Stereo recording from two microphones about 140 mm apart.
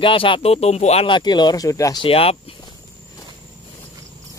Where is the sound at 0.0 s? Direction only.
40° left (ahead or behind).